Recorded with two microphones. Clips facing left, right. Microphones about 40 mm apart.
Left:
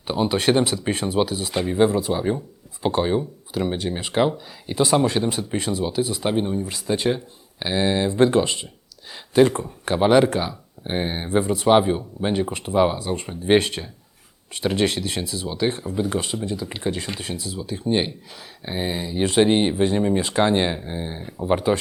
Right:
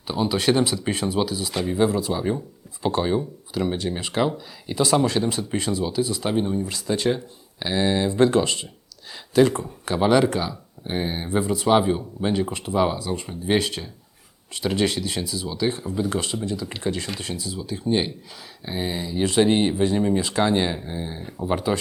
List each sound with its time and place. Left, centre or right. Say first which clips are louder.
0.1 s speech: left 2 dB; left
14.7 s speech: left 1 dB; centre
17.3 s speech: left 1 dB; left